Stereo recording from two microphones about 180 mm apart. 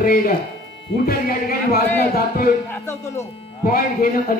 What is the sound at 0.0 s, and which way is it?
A man's voice, 55° left (ahead or behind).